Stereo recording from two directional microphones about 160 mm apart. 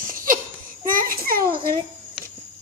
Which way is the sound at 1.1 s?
65° right (ahead or behind).